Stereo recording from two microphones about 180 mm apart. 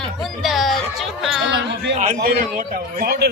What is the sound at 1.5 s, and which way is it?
Speech, 75° right (ahead or behind).